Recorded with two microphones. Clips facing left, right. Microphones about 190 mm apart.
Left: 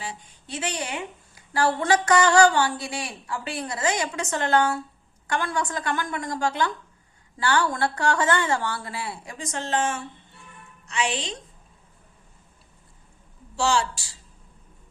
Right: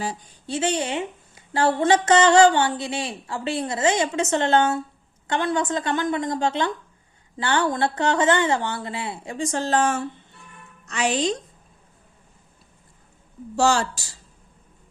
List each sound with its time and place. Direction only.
0.0 s a woman's voice: 35° right (ahead or behind)
13.6 s speech: 45° right (ahead or behind)